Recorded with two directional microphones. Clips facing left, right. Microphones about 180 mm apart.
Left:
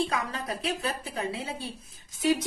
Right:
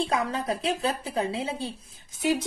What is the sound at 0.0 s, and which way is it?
A woman's voice, 30° right (ahead or behind).